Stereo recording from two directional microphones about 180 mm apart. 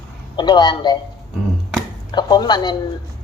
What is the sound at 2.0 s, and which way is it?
Speech, 25° left (ahead or behind).